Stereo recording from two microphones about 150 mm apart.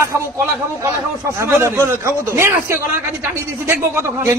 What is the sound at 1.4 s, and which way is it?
Speech, 15° right (ahead or behind).